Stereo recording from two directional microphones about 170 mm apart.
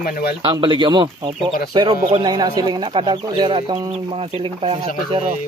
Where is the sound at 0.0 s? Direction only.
70° left (ahead or behind).